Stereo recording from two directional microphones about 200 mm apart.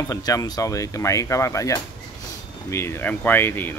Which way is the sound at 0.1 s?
20° left (ahead or behind).